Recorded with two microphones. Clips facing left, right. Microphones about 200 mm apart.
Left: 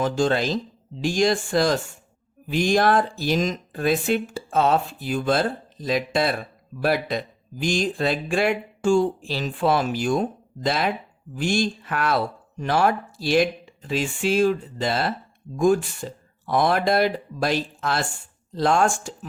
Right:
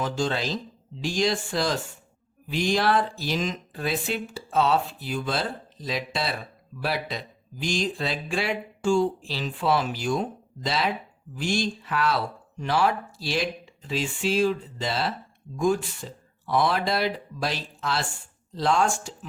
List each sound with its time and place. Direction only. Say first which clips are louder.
0.0 s speech: left 5 dB; 50° left (ahead or behind)